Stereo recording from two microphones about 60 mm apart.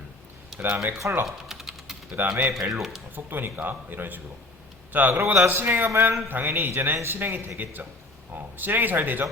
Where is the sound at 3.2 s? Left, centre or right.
Right.